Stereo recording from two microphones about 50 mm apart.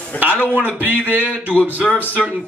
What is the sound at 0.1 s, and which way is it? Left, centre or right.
Speech, left.